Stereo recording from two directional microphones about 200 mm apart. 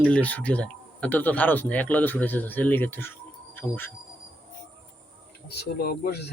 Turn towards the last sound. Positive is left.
turn(degrees=50)  # may be behind; listen again after turning